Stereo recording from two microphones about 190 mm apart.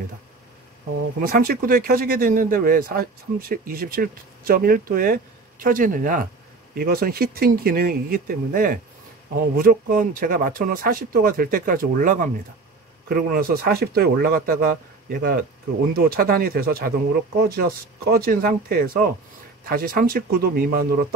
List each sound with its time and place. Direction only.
1.2 s speech: 50° right (ahead or behind)